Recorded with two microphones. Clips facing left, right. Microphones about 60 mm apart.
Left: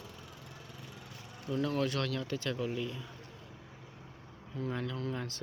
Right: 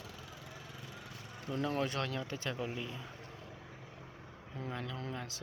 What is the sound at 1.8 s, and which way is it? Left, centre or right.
Speech, centre.